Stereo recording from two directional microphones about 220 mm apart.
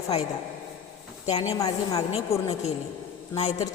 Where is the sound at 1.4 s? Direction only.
15° left (ahead or behind).